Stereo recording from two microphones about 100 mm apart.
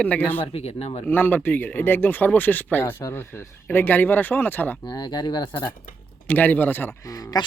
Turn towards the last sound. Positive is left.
turn(degrees=40)  # may be behind; listen again after turning